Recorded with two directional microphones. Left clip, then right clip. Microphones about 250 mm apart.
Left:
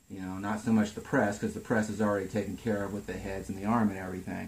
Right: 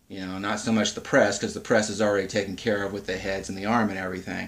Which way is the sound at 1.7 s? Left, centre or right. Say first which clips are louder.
Right 8 dB; centre.